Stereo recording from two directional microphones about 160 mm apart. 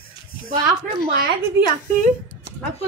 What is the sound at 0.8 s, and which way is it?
Speech, 75° right (ahead or behind).